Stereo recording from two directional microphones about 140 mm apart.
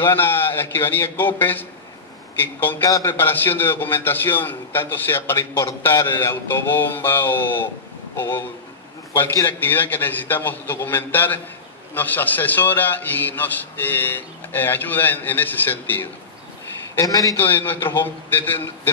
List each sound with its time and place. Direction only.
0.0 s a man's voice: 15° left (ahead or behind)